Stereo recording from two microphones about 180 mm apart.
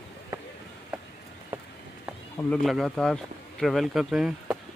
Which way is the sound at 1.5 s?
10° right (ahead or behind).